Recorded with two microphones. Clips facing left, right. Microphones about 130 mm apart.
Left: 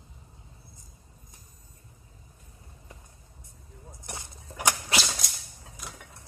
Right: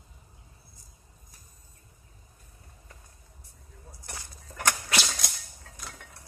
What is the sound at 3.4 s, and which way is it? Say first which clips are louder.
Vehicle: left 3 dB; 20° left (ahead or behind).